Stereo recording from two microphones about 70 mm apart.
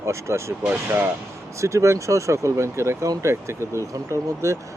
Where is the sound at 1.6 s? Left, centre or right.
Right.